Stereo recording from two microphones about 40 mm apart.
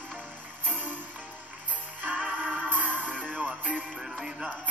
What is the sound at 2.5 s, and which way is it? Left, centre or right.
Music, right.